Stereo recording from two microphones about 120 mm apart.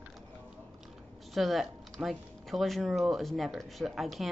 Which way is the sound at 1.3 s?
Centre (ahead or behind).